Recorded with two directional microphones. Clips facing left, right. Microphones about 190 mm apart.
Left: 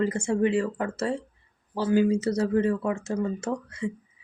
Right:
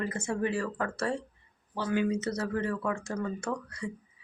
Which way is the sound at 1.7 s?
35° left (ahead or behind).